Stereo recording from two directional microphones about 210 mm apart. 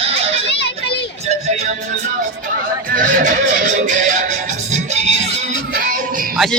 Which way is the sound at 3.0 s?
40° right (ahead or behind).